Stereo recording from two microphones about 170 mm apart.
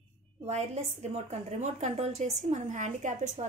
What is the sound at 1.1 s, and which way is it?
A woman's voice, 40° right (ahead or behind).